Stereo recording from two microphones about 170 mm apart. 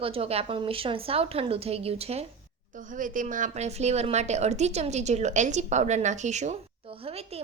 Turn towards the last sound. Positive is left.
turn(degrees=-35)  # may be behind; listen again after turning